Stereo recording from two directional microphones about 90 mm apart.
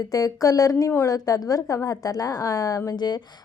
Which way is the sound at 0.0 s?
40° left (ahead or behind).